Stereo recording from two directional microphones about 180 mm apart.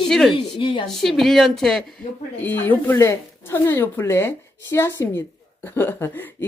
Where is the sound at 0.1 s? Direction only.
Centre (ahead or behind).